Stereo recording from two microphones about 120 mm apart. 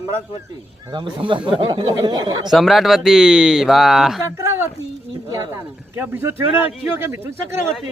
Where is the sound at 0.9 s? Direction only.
45° right (ahead or behind).